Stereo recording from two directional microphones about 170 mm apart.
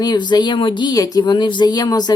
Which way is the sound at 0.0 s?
25° left (ahead or behind).